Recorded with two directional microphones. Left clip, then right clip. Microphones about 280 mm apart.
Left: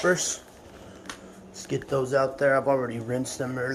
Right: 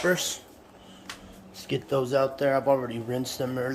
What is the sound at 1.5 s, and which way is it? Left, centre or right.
Speech, centre.